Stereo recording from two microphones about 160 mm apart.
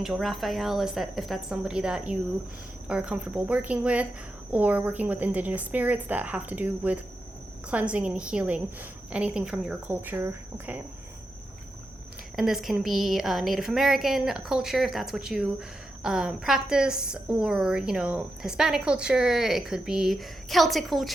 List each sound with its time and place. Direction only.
0.0 s a woman's voice: centre (ahead or behind)
12.4 s a woman's voice: centre (ahead or behind)